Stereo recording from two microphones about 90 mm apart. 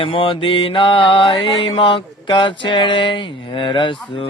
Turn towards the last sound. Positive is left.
turn(degrees=75)  # may be behind; listen again after turning